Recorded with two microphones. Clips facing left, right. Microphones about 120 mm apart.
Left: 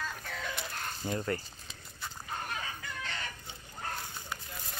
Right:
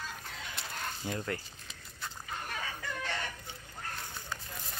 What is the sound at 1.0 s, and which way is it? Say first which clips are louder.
Speech: left 4 dB; centre (ahead or behind).